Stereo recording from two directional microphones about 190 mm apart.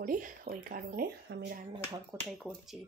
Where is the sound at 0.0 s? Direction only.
45° right (ahead or behind).